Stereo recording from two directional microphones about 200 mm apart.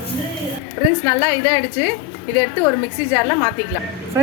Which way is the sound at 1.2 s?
20° left (ahead or behind).